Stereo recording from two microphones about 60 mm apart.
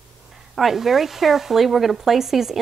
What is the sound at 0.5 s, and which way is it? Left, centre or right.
Speech, centre.